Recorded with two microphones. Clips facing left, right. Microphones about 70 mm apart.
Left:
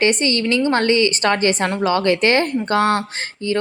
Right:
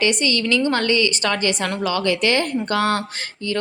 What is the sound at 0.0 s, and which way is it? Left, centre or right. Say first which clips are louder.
A woman's voice: left 2 dB; left.